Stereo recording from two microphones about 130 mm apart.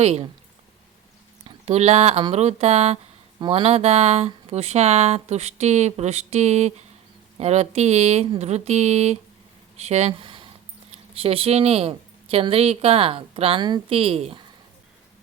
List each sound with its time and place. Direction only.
0.0 s speech: 55° right (ahead or behind)
1.5 s speech: 55° right (ahead or behind); by 13.8 s 35° right (ahead or behind)
13.9 s speech: 50° right (ahead or behind)